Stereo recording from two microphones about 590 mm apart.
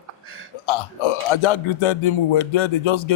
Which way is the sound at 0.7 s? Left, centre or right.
Left.